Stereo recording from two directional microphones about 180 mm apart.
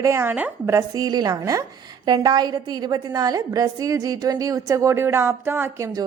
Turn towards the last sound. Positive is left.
turn(degrees=-20)  # may be behind; listen again after turning